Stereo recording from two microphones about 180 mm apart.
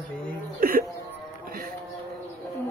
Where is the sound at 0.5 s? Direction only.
55° right (ahead or behind).